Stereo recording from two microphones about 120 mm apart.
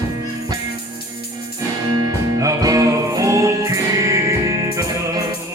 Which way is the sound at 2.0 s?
30° right (ahead or behind).